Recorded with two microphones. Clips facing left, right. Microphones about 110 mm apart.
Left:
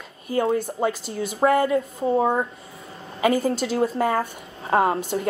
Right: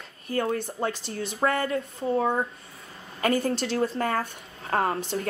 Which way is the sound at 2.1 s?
20° left (ahead or behind).